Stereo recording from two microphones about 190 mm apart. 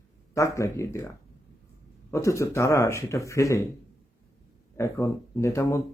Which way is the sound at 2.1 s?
15° left (ahead or behind).